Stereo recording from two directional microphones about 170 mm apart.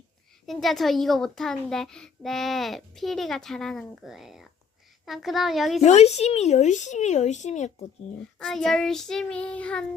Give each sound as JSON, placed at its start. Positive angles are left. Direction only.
{"t": 0.4, "sound": "a child's voice", "side_deg": 0}
{"t": 5.8, "sound": "speech", "side_deg": 40}
{"t": 8.4, "sound": "a child's voice", "side_deg": 5}